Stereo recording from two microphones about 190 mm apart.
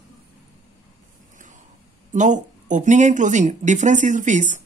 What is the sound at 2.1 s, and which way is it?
Speech, 40° right (ahead or behind).